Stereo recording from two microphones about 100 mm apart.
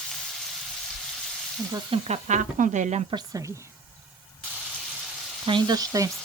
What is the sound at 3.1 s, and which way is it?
Speech, 55° right (ahead or behind).